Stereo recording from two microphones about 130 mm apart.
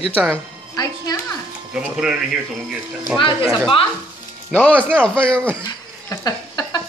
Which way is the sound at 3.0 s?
35° left (ahead or behind).